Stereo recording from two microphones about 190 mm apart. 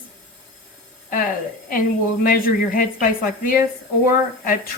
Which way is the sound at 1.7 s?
45° left (ahead or behind).